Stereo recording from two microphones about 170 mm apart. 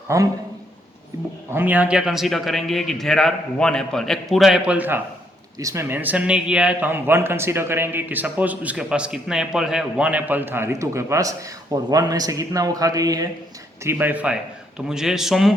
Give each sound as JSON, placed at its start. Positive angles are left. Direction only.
{"t": 0.1, "sound": "a man's voice", "side_deg": -15}
{"t": 13.8, "sound": "a man's voice", "side_deg": -10}